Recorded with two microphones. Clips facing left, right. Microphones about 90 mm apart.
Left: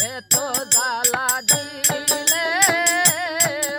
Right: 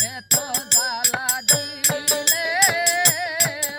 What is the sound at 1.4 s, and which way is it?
Music, 5° right (ahead or behind).